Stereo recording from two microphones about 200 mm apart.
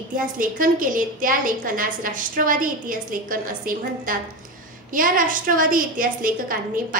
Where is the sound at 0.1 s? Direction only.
45° right (ahead or behind).